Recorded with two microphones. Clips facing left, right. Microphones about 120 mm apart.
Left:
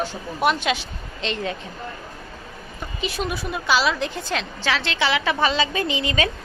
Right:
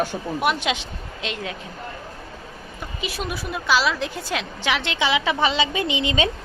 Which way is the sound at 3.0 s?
Centre (ahead or behind).